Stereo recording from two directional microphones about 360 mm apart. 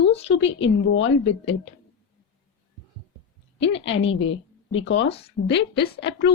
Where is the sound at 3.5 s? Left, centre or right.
Left.